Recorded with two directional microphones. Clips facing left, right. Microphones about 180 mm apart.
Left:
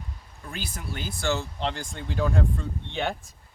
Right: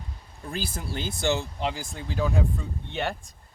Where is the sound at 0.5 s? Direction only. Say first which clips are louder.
Right 3 dB; 30° right (ahead or behind); by 3.2 s 5° right (ahead or behind).